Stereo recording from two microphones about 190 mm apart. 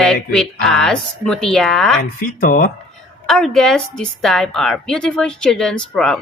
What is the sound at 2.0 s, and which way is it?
Speech, 45° left (ahead or behind).